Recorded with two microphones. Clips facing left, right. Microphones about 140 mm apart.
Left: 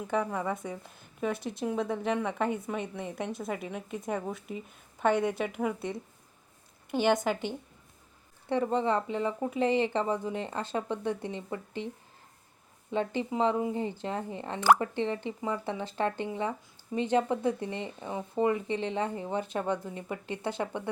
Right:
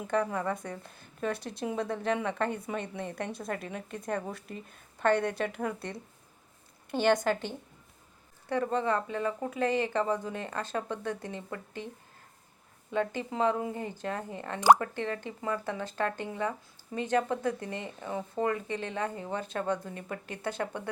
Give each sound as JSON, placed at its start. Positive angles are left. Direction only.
{"t": 0.1, "sound": "a woman's voice", "side_deg": 5}
{"t": 8.4, "sound": "speech", "side_deg": 20}
{"t": 12.9, "sound": "speech", "side_deg": 20}